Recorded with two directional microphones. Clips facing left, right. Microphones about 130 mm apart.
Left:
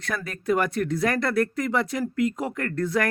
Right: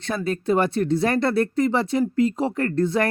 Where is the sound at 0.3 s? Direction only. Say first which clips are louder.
Right 3 dB; 30° right (ahead or behind).